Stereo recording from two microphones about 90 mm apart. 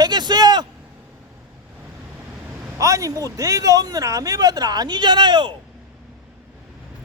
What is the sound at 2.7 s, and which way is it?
Speech, 35° right (ahead or behind).